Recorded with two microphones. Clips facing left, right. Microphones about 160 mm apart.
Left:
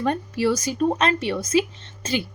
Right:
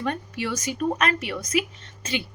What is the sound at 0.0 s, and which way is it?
A woman's voice, 35° left (ahead or behind).